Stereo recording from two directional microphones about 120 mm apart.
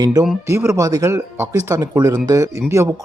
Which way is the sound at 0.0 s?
30° right (ahead or behind).